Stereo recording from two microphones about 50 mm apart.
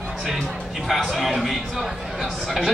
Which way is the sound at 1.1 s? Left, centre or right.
Centre.